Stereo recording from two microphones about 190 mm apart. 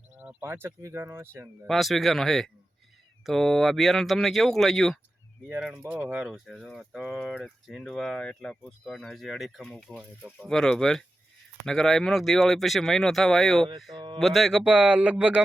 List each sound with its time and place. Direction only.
0.2 s speech: 10° right (ahead or behind)
1.6 s speech: centre (ahead or behind)
13.9 s speech: 25° right (ahead or behind)
14.2 s speech: centre (ahead or behind)